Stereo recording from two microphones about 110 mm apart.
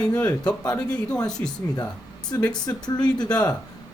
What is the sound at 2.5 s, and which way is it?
Speech, 40° left (ahead or behind).